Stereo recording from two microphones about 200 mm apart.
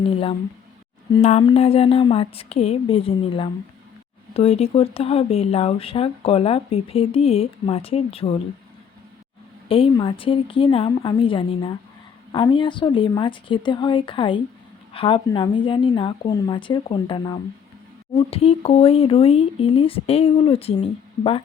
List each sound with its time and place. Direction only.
0.0 s speech: 25° left (ahead or behind)
1.2 s a sound: 35° left (ahead or behind)
1.5 s speech: 30° left (ahead or behind)
9.6 s speech: 25° left (ahead or behind)